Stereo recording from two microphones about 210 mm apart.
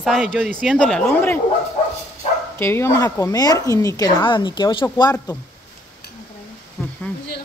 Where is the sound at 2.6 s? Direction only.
10° left (ahead or behind).